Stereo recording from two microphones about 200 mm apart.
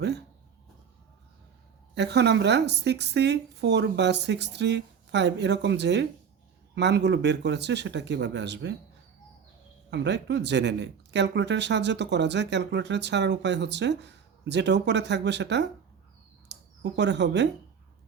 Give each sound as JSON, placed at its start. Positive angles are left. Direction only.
{"t": 2.0, "sound": "speech", "side_deg": -60}
{"t": 9.9, "sound": "speech", "side_deg": -60}